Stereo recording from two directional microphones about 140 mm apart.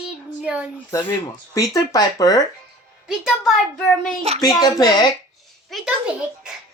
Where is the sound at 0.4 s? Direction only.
10° right (ahead or behind).